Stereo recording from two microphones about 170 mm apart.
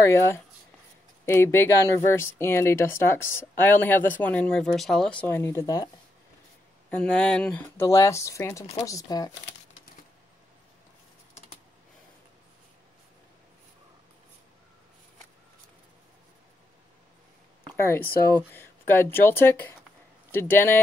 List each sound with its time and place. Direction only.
0.0 s speech: 15° left (ahead or behind)
6.9 s speech: 5° left (ahead or behind)
17.7 s speech: 15° left (ahead or behind)